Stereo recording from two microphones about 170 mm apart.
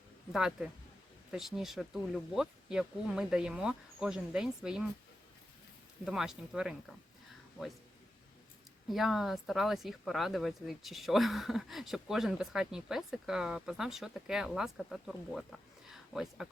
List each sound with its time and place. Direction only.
0.3 s speech: 5° right (ahead or behind)
6.1 s speech: 5° right (ahead or behind)
8.9 s speech: centre (ahead or behind)
15.9 s a sound: centre (ahead or behind)